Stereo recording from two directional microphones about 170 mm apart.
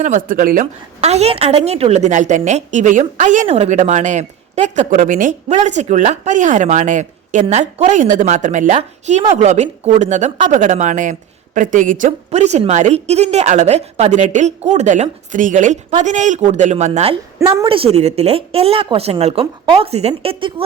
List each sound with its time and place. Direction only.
0.0 s a woman's voice: 50° right (ahead or behind)
1.0 s a woman's voice: 35° right (ahead or behind)